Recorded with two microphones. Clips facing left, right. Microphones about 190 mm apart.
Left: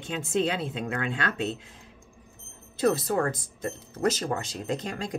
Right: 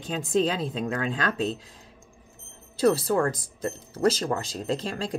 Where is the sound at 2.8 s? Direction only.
30° right (ahead or behind).